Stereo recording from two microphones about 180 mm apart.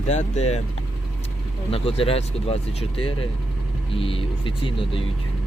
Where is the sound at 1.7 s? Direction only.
30° left (ahead or behind).